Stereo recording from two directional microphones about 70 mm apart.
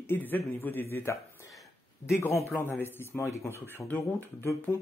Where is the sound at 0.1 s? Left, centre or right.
Left.